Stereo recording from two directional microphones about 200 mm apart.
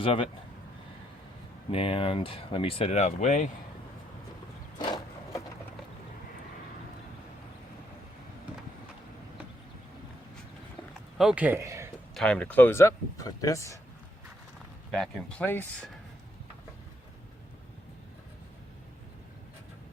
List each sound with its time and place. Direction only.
0.0 s speech: 25° left (ahead or behind)
1.7 s speech: 25° left (ahead or behind)
11.2 s speech: 5° right (ahead or behind)
12.1 s speech: 5° left (ahead or behind)
14.9 s speech: 5° left (ahead or behind)